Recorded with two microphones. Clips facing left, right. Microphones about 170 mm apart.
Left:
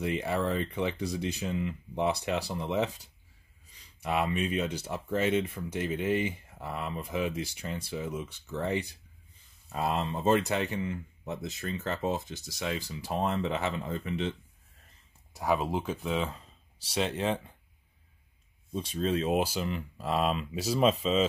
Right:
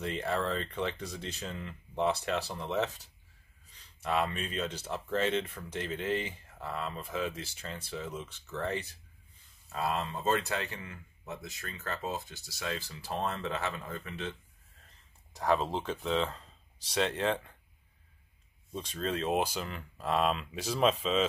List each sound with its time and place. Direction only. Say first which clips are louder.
0.0 s speech: left 3 dB; 10° left (ahead or behind)
15.3 s speech: left 1 dB; 10° left (ahead or behind)
18.7 s speech: left 5 dB; 10° left (ahead or behind)
21.0 s speech: left 3 dB; 40° left (ahead or behind)